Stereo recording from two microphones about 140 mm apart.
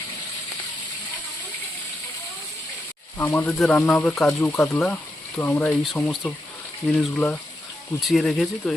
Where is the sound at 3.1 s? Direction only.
15° left (ahead or behind).